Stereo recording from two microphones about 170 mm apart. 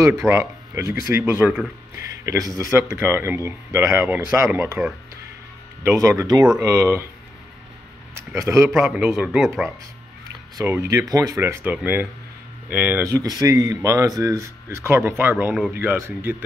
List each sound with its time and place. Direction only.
0.0 s speech: 15° right (ahead or behind)
5.9 s speech: 20° right (ahead or behind)
8.4 s speech: 20° right (ahead or behind)
8.6 s a man's voice: 5° right (ahead or behind)
10.6 s speech: 15° right (ahead or behind)